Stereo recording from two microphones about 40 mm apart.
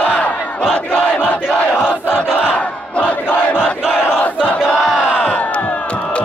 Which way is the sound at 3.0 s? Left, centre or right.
Left.